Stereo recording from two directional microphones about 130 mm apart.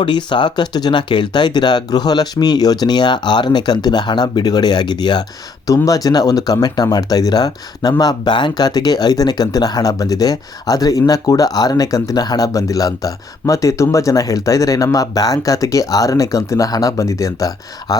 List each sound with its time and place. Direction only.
0.0 s speech: 35° left (ahead or behind)